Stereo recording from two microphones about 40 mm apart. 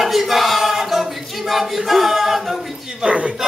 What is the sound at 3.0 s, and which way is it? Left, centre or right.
Speech, right.